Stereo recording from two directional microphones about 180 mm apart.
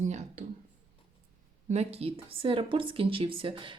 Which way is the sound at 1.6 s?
35° right (ahead or behind).